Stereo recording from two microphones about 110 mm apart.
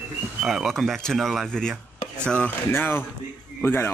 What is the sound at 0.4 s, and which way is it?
Speech, centre (ahead or behind).